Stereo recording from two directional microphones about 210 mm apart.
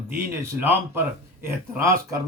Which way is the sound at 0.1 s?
10° right (ahead or behind).